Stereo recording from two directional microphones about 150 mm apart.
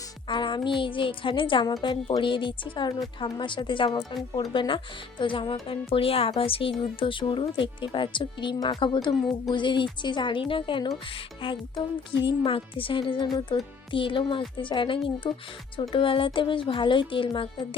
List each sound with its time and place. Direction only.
0.3 s speech: 30° left (ahead or behind)
12.4 s speech: 35° left (ahead or behind)